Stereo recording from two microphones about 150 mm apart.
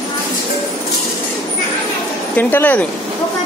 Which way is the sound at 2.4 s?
10° left (ahead or behind).